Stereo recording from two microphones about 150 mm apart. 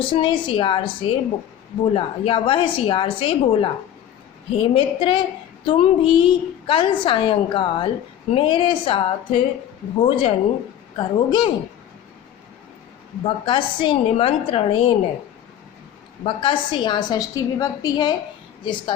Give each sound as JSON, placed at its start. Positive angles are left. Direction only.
{"t": 0.0, "sound": "a woman's voice", "side_deg": 35}
{"t": 13.2, "sound": "a woman's voice", "side_deg": 35}
{"t": 16.2, "sound": "a woman's voice", "side_deg": 35}